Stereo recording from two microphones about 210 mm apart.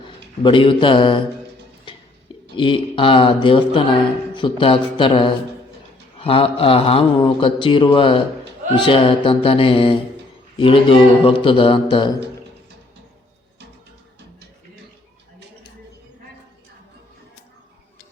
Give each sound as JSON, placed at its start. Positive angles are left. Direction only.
{"t": 0.4, "sound": "speech", "side_deg": 25}
{"t": 2.6, "sound": "speech", "side_deg": 25}